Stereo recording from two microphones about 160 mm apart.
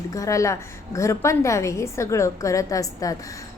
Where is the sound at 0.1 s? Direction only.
20° left (ahead or behind).